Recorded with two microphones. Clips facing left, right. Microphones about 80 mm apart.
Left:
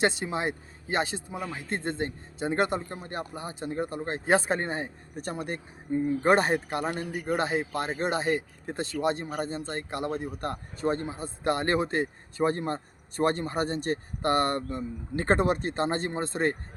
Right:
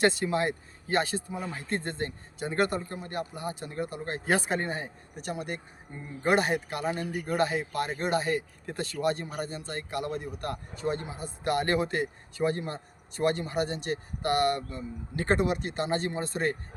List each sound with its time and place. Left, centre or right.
0.0 s a man's voice: left
7.0 s speech: centre
7.3 s a man's voice: left